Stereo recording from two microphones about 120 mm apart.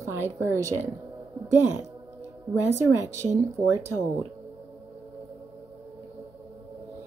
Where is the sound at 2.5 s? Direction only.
20° right (ahead or behind).